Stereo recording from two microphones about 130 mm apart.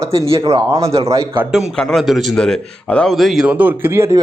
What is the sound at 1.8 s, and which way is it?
A man's voice, 5° left (ahead or behind).